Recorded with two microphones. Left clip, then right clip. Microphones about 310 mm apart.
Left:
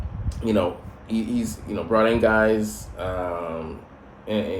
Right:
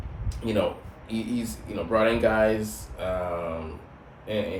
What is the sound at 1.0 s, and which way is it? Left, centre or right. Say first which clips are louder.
Speech: left 4 dB; centre.